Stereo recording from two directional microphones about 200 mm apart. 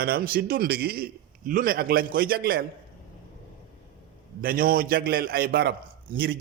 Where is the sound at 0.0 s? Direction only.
50° right (ahead or behind).